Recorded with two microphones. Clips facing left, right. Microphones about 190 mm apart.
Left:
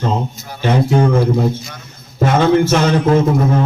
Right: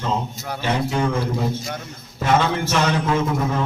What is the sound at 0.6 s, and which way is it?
Speech, 50° left (ahead or behind).